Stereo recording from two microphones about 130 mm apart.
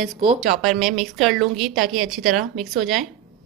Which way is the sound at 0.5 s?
Centre (ahead or behind).